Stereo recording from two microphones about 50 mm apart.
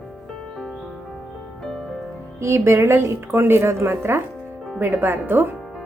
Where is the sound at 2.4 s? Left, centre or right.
Right.